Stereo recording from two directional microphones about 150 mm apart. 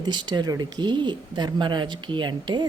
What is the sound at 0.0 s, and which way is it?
Speech, 30° right (ahead or behind).